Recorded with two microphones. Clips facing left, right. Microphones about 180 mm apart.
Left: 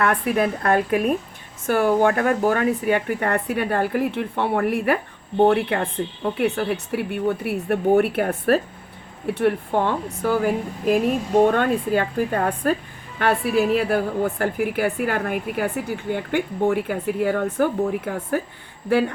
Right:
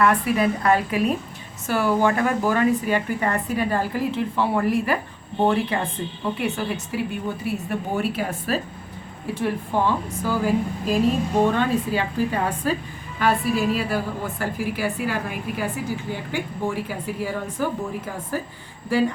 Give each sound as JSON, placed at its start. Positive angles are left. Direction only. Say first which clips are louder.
{"t": 0.0, "sound": "a woman's voice", "louder": "right 1 dB", "side_deg": 55}